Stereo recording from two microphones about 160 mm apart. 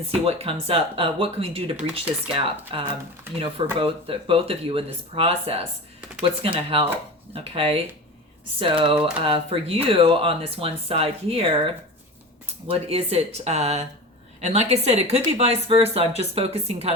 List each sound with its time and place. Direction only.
0.0 s speech: 40° right (ahead or behind)